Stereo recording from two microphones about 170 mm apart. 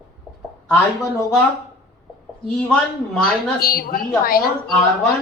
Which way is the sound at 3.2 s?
60° left (ahead or behind).